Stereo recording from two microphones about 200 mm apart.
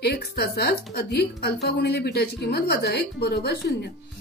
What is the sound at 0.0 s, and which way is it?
A woman's voice, 50° left (ahead or behind).